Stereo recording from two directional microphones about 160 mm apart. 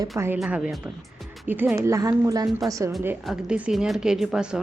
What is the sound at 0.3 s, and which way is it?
A woman's voice, 5° right (ahead or behind).